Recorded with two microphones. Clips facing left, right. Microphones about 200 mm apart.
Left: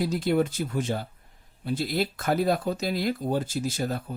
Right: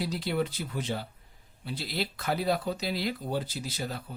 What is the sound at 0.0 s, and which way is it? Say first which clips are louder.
Speech: left 6 dB; 45° left (ahead or behind).